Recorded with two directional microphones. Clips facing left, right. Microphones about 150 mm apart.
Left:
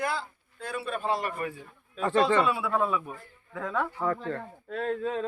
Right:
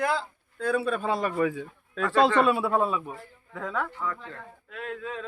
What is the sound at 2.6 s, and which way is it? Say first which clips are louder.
Speech: right 3 dB; 35° right (ahead or behind).